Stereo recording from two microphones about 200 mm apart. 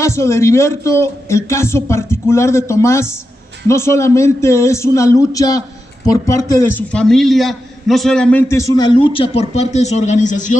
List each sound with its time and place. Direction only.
0.0 s a man's voice: 15° left (ahead or behind); by 10.6 s 40° left (ahead or behind)